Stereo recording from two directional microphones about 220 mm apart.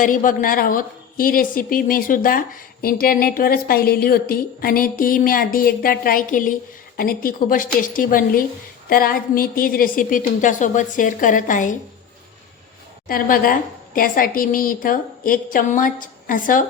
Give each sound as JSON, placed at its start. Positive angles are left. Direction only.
{"t": 0.0, "sound": "a woman's voice", "side_deg": 40}
{"t": 13.1, "sound": "a woman's voice", "side_deg": 40}